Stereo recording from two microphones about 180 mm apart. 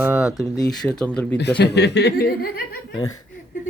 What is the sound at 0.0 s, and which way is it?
Speech, 5° right (ahead or behind).